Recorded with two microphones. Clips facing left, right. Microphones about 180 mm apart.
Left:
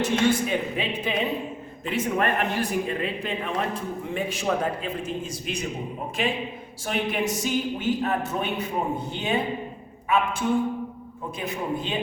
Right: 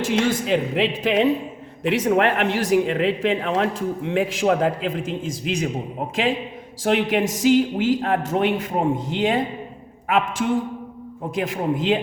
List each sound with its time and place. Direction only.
0.0 s speech: 90° right
6.8 s speech: 90° right
11.3 s speech: 90° right